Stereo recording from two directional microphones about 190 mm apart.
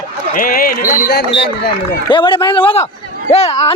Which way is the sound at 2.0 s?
25° left (ahead or behind).